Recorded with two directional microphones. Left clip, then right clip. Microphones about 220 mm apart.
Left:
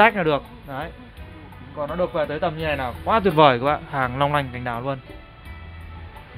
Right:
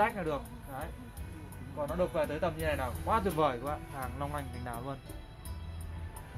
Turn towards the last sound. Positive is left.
turn(degrees=35)  # may be behind; listen again after turning